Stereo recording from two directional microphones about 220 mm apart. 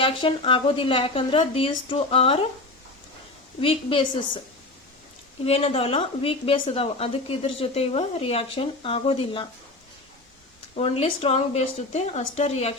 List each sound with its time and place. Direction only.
0.0 s a woman's voice: 25° left (ahead or behind)
3.6 s a woman's voice: 25° left (ahead or behind)
5.5 s a woman's voice: 25° left (ahead or behind)
10.8 s a woman's voice: 25° left (ahead or behind)